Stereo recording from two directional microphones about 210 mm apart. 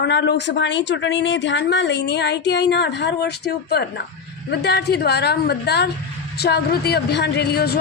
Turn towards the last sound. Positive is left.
turn(degrees=50)  # may be behind; listen again after turning